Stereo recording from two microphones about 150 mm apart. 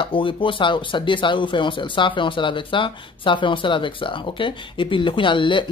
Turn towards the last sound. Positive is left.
turn(degrees=35)  # may be behind; listen again after turning